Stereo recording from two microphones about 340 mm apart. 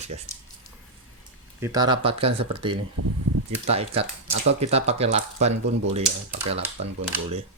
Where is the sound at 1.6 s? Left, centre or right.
Centre.